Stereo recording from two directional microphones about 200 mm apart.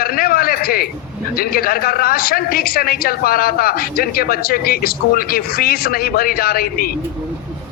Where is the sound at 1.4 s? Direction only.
45° left (ahead or behind).